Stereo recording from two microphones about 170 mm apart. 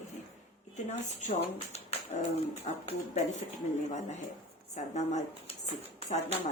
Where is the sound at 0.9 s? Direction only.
40° left (ahead or behind).